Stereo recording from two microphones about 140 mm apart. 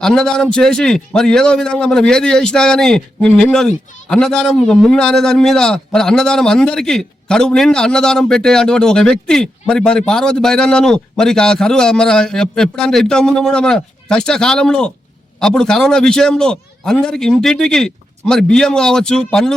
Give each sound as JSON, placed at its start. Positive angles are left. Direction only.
{"t": 0.0, "sound": "a man's voice", "side_deg": 5}